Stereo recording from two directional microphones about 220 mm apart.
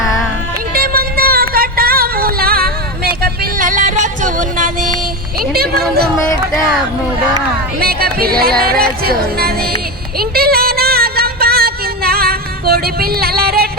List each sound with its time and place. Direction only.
0.7 s music: 40° right (ahead or behind)
7.8 s speech: 45° right (ahead or behind)
10.2 s music: 45° right (ahead or behind)